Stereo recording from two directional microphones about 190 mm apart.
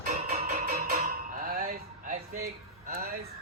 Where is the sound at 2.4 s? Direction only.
50° right (ahead or behind).